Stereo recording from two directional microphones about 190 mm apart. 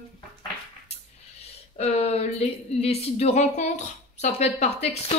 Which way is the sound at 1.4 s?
35° left (ahead or behind).